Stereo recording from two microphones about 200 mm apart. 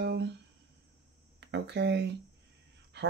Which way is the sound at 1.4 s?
60° right (ahead or behind).